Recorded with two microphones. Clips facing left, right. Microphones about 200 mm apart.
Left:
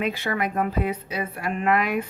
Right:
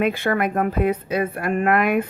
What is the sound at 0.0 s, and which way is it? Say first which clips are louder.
A woman's voice: right 5 dB; 55° right (ahead or behind).